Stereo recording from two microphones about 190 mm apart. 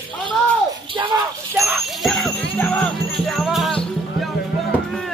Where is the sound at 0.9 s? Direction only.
25° right (ahead or behind).